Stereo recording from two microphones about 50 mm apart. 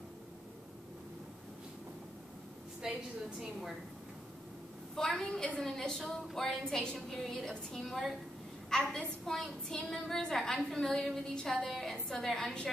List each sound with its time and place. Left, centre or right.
2.8 s a woman's voice: centre
4.9 s a woman's voice: centre
6.6 s a woman's voice: centre